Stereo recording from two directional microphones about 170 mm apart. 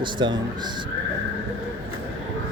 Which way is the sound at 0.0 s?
25° right (ahead or behind).